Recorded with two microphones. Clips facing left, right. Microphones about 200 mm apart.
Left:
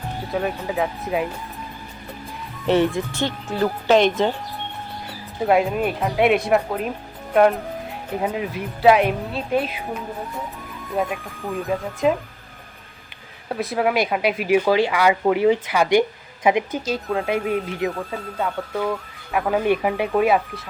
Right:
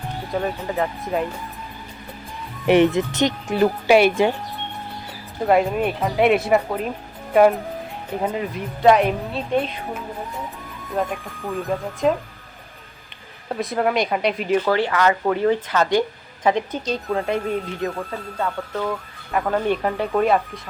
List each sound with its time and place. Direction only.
0.3 s speech: centre (ahead or behind)
2.6 s speech: 15° right (ahead or behind)
5.4 s speech: centre (ahead or behind)
10.9 s speech: centre (ahead or behind)
13.5 s speech: centre (ahead or behind)
17.5 s speech: 10° left (ahead or behind)
17.9 s speech: centre (ahead or behind)